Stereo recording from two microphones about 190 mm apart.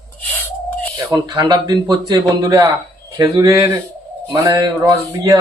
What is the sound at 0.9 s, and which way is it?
A man's voice, 20° right (ahead or behind).